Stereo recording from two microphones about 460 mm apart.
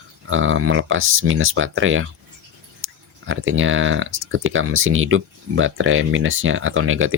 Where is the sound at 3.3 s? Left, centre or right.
Right.